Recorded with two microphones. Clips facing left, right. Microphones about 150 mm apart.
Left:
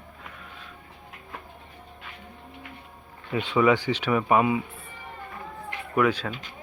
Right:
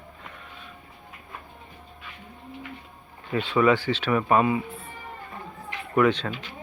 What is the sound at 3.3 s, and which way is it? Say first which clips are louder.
Speech: even; 15° left (ahead or behind).